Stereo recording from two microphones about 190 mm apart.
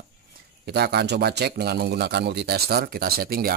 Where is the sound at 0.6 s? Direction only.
60° right (ahead or behind).